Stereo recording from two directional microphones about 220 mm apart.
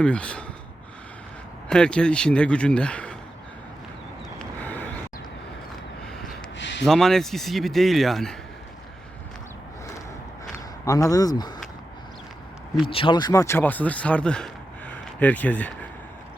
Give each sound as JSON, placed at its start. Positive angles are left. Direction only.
{"t": 0.0, "sound": "speech", "side_deg": 5}
{"t": 1.7, "sound": "speech", "side_deg": 5}
{"t": 4.4, "sound": "vehicle", "side_deg": 5}
{"t": 6.6, "sound": "gasp", "side_deg": 55}
{"t": 6.8, "sound": "speech", "side_deg": 0}
{"t": 10.8, "sound": "speech", "side_deg": 15}
{"t": 12.8, "sound": "speech", "side_deg": 25}